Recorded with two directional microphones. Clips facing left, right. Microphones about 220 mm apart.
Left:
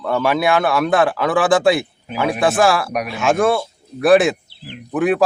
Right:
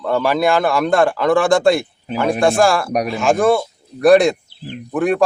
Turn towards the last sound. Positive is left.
turn(degrees=5)  # may be behind; listen again after turning